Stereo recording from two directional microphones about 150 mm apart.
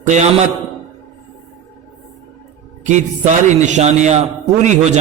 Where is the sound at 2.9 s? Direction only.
55° right (ahead or behind).